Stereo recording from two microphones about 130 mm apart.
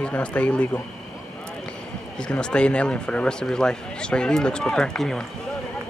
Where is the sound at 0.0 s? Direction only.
10° left (ahead or behind).